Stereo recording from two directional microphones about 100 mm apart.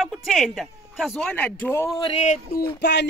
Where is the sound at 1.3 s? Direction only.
15° left (ahead or behind).